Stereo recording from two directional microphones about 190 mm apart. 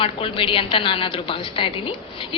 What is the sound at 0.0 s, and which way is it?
A woman's voice, 30° left (ahead or behind).